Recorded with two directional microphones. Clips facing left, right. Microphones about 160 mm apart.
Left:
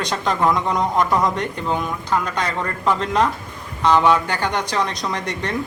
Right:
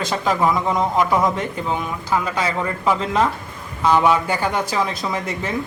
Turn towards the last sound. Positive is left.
turn(degrees=-5)  # may be behind; listen again after turning